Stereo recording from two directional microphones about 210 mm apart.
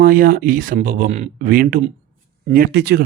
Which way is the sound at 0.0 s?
40° right (ahead or behind).